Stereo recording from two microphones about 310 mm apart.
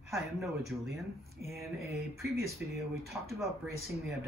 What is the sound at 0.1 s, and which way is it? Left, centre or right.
Speech, centre.